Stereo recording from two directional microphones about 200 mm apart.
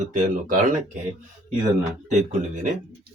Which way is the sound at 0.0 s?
40° right (ahead or behind).